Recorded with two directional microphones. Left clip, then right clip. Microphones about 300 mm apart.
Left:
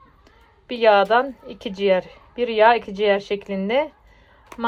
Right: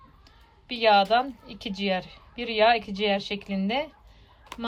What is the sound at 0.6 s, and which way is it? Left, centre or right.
Speech, centre.